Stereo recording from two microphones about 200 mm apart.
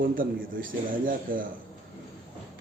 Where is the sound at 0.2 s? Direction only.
45° right (ahead or behind).